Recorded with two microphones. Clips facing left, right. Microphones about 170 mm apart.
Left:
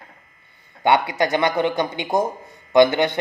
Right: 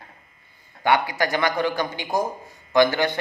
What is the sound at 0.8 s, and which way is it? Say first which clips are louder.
Speech: left 3 dB; 20° left (ahead or behind).